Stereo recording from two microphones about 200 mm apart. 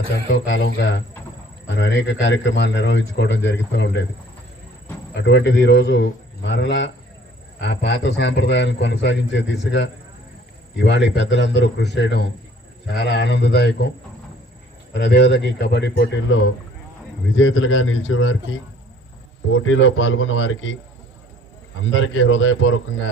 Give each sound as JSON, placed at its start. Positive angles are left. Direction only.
{"t": 0.1, "sound": "a man's voice", "side_deg": 65}
{"t": 5.1, "sound": "a man's voice", "side_deg": 60}
{"t": 14.9, "sound": "a man's voice", "side_deg": 60}
{"t": 17.3, "sound": "a man's voice", "side_deg": 75}
{"t": 21.8, "sound": "speech", "side_deg": 75}